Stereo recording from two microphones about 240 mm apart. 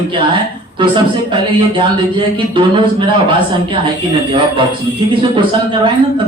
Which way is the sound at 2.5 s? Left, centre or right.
Right.